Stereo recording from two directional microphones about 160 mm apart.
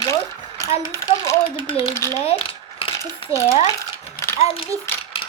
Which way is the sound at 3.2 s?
35° left (ahead or behind).